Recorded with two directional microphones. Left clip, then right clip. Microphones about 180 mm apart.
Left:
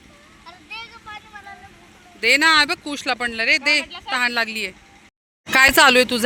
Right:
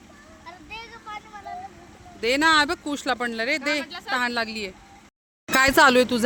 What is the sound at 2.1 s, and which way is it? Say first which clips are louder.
Speech: left 4 dB; 5° right (ahead or behind).